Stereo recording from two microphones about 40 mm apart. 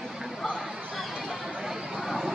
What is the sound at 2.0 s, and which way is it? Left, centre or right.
Vehicle, centre.